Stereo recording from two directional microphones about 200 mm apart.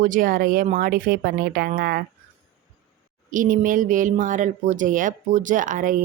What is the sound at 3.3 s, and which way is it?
Speech, 40° right (ahead or behind).